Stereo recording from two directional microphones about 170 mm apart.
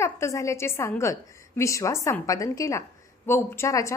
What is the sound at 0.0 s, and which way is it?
A woman's voice, 15° left (ahead or behind).